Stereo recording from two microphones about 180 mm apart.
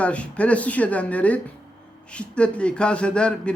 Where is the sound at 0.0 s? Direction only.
5° left (ahead or behind).